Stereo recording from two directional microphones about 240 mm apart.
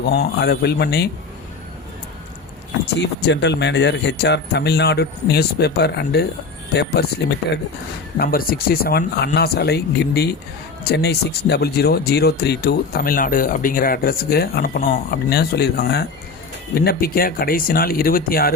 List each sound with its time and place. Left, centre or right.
0.1 s speech: left
2.8 s speech: left